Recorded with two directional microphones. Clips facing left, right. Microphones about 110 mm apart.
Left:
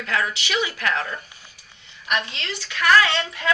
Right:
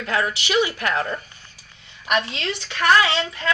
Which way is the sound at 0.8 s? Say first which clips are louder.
Right 2 dB; 15° right (ahead or behind).